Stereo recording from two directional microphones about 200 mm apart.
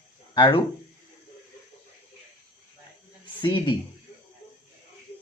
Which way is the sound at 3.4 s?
25° left (ahead or behind).